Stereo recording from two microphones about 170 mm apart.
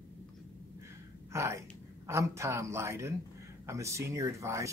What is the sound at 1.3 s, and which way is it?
A woman's voice, 15° right (ahead or behind).